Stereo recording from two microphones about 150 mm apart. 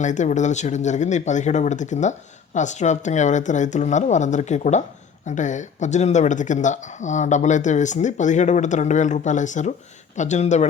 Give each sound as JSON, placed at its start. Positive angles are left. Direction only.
{"t": 0.0, "sound": "speech", "side_deg": 55}